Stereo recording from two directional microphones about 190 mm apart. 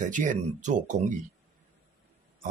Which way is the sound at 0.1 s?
40° right (ahead or behind).